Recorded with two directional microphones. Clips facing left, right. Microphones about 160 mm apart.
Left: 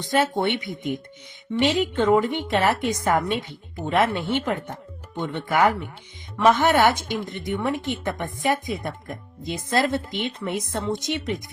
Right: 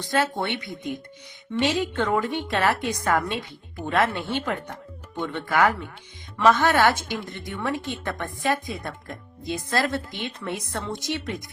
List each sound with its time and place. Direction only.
0.0 s a woman's voice: 20° left (ahead or behind)